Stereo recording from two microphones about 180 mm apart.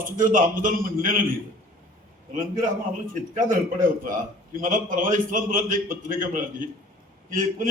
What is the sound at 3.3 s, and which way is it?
A man's voice, 45° right (ahead or behind).